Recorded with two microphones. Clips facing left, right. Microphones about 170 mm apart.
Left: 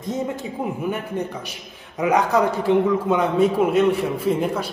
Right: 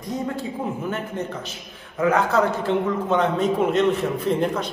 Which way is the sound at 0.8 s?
10° left (ahead or behind).